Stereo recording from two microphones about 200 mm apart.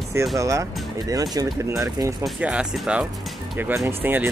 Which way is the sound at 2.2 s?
5° right (ahead or behind).